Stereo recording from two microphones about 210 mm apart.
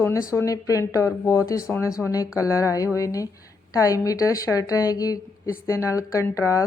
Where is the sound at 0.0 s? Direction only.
15° left (ahead or behind).